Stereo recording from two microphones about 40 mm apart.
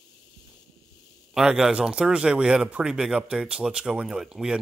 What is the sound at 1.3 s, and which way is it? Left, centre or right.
Speech, centre.